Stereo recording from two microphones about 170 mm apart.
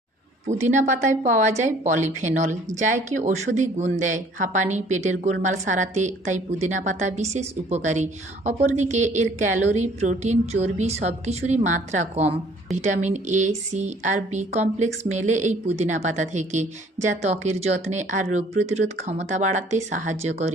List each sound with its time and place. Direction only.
0.4 s speech: 45° right (ahead or behind)